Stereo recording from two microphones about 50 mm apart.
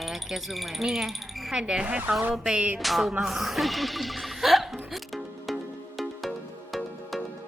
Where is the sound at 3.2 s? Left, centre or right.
Centre.